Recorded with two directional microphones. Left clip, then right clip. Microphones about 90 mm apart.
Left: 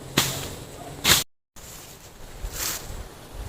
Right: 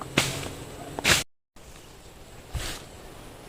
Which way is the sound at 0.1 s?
5° right (ahead or behind).